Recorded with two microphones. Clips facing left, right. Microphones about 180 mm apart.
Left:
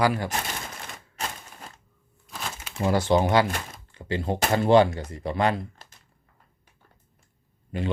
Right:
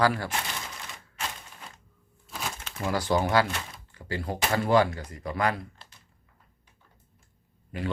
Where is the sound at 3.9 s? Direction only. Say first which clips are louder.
Left 5 dB; 25° left (ahead or behind).